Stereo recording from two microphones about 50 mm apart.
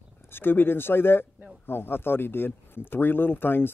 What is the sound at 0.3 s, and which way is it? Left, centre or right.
Speech, left.